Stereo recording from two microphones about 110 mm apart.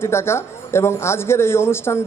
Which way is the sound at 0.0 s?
25° left (ahead or behind).